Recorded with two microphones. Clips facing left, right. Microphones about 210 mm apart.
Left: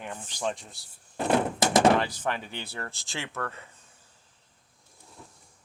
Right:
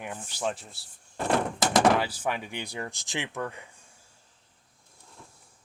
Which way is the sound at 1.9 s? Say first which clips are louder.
Left 1 dB; 5° right (ahead or behind).